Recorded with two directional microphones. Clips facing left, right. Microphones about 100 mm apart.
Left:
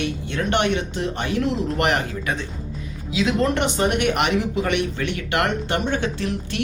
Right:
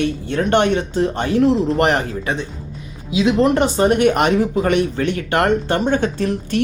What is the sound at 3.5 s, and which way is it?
Speech, 35° right (ahead or behind).